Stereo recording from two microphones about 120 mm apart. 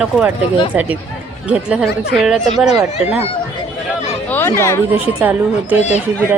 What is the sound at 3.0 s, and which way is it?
Speech, 15° right (ahead or behind).